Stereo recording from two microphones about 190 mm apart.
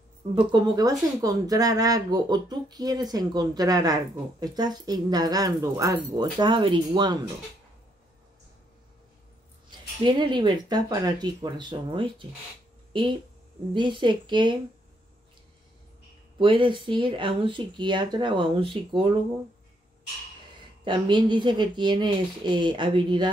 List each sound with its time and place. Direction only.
0.3 s speech: 25° right (ahead or behind)
9.7 s speech: 25° right (ahead or behind)
13.7 s speech: 25° right (ahead or behind)
16.3 s speech: 25° right (ahead or behind)
20.8 s speech: 25° right (ahead or behind)